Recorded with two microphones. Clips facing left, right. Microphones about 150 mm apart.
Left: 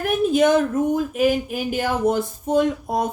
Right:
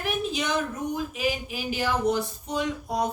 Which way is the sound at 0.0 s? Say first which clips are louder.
Left 11 dB; 50° left (ahead or behind).